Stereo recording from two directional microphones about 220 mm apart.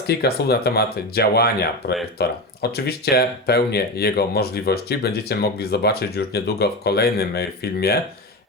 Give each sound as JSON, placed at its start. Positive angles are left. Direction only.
{"t": 0.1, "sound": "speech", "side_deg": 45}